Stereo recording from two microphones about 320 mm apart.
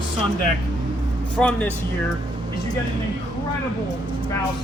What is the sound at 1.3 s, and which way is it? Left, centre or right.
Speech, centre.